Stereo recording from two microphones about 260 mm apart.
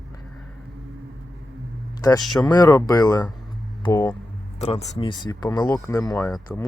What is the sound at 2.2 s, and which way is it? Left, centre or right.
Speech, centre.